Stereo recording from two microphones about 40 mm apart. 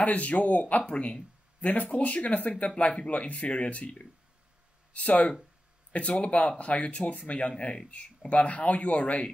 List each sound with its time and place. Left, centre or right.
0.0 s speech: left
4.9 s speech: left